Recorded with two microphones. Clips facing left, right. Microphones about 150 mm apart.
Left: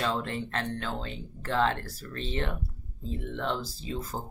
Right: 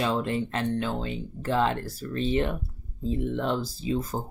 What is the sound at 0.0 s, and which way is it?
Speech, 15° right (ahead or behind).